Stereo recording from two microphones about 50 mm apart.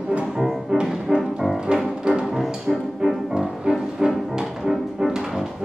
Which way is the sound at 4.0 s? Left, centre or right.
Centre.